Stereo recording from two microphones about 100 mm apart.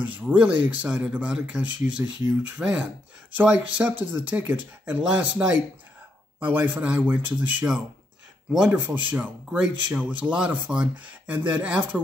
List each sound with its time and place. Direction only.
0.0 s speech: 15° right (ahead or behind)